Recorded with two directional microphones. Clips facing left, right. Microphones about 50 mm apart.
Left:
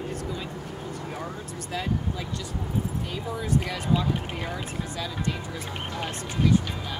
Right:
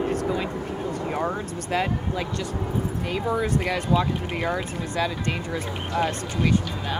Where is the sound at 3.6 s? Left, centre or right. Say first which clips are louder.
Right 4 dB; right.